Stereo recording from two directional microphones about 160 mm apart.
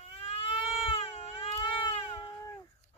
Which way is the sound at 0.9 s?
40° left (ahead or behind).